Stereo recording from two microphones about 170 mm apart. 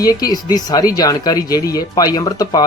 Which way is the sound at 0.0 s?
20° left (ahead or behind).